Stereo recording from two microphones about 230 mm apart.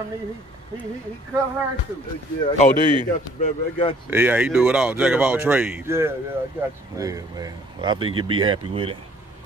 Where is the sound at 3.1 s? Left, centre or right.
Left.